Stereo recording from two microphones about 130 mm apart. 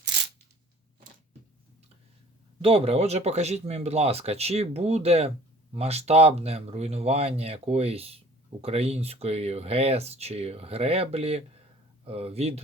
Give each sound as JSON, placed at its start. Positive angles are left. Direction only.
{"t": 2.6, "sound": "speech", "side_deg": -45}